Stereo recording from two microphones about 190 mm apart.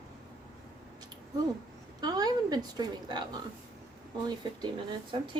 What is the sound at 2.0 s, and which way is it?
A woman's voice, 20° right (ahead or behind).